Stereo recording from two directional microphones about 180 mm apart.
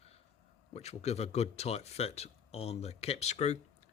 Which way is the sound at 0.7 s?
35° left (ahead or behind).